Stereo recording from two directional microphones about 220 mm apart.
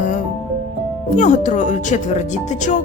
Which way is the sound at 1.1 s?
35° left (ahead or behind).